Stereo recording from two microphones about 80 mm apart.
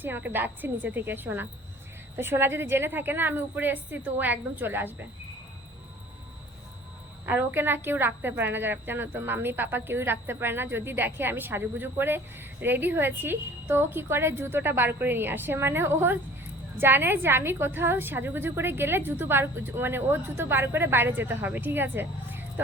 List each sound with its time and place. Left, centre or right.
0.0 s a woman's voice: right
7.3 s a woman's voice: right